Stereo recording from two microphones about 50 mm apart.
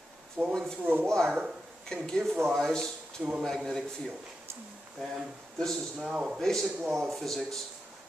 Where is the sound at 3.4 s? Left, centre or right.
Centre.